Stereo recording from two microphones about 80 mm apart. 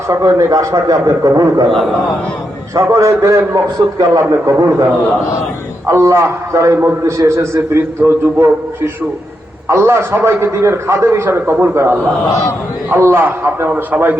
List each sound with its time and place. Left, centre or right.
0.1 s a man's voice: right
2.7 s a man's voice: right
5.9 s a man's voice: right